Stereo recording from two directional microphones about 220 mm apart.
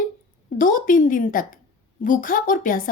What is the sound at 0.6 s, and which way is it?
A woman's voice, 40° left (ahead or behind).